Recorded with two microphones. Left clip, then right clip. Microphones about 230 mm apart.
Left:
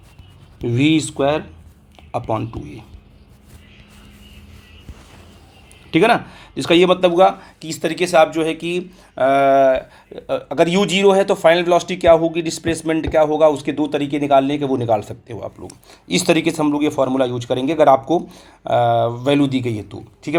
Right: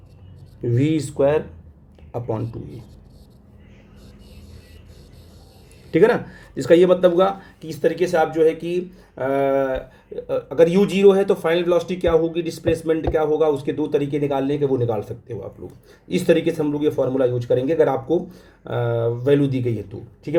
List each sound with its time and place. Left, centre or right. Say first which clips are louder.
0.7 s speech: left 5 dB; left
5.9 s speech: left 2 dB; centre